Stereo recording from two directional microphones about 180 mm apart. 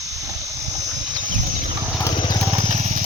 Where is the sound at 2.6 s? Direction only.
40° right (ahead or behind).